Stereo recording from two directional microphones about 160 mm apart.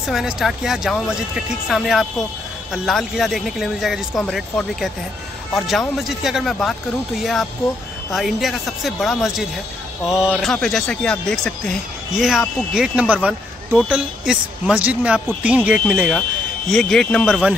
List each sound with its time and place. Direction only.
0.0 s speech: centre (ahead or behind)
16.2 s speech: 5° left (ahead or behind)